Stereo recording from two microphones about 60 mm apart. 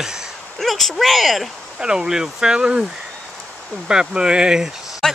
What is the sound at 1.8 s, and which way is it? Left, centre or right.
Speech, centre.